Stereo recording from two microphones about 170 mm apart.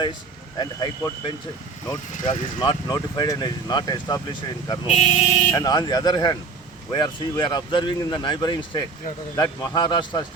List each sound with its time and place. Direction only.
0.6 s speech: 25° left (ahead or behind)
2.1 s speech: 45° left (ahead or behind)
2.6 s speech: 25° left (ahead or behind)